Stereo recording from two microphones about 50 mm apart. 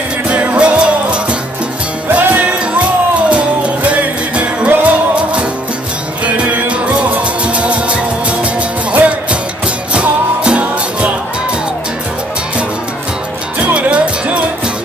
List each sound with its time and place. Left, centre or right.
0.3 s music: right
2.0 s music: right
2.6 s music: right
13.7 s music: right